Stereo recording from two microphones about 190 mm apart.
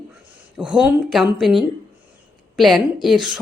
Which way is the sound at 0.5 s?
5° right (ahead or behind).